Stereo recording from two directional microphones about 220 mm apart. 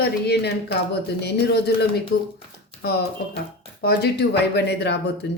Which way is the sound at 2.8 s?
45° left (ahead or behind).